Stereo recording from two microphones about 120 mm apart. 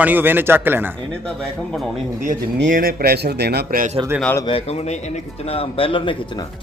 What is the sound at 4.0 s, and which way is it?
Speech, 40° right (ahead or behind).